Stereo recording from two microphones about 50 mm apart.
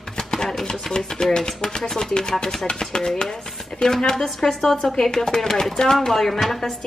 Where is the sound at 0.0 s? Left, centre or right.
Centre.